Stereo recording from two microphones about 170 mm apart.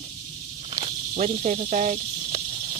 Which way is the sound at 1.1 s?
50° right (ahead or behind).